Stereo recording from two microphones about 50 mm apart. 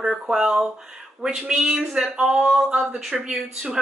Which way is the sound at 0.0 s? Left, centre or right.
Centre.